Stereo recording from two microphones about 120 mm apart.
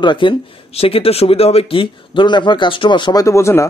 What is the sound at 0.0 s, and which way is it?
Speech, 40° left (ahead or behind).